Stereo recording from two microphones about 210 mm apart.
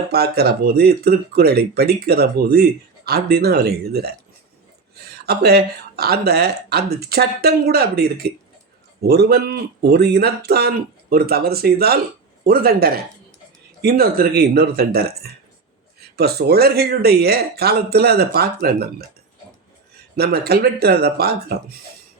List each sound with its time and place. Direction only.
0.1 s speech: 50° right (ahead or behind)
5.1 s speech: 50° right (ahead or behind)
20.1 s speech: 50° right (ahead or behind)